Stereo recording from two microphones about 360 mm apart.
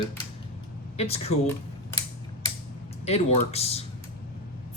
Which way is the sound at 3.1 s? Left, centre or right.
Centre.